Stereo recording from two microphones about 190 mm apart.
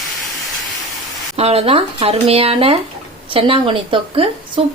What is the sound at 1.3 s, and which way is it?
Speech, 30° right (ahead or behind).